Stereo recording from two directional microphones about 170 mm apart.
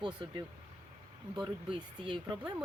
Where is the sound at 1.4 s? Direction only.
5° right (ahead or behind).